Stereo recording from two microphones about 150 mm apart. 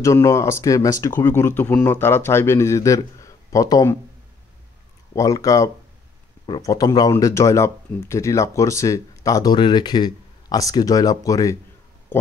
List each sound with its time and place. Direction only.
0.0 s speech: 20° left (ahead or behind)
5.1 s speech: 25° left (ahead or behind)